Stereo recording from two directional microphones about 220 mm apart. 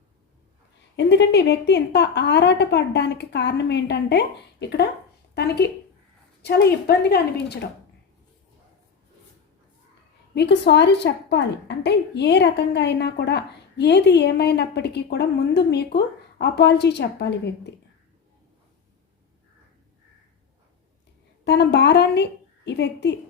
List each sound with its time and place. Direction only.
0.9 s a woman's voice: 50° left (ahead or behind)
10.3 s a woman's voice: 50° left (ahead or behind)
21.4 s a woman's voice: 50° left (ahead or behind)